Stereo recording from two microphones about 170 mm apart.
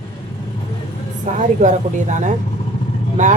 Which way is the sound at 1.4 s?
45° right (ahead or behind).